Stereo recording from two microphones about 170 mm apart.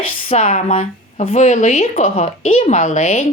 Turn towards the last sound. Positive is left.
turn(degrees=40)  # may be behind; listen again after turning